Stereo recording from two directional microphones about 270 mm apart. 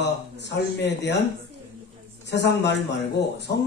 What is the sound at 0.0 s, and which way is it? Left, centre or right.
A man's voice, left.